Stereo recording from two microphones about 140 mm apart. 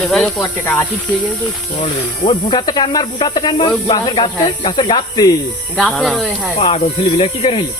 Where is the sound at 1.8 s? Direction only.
40° left (ahead or behind).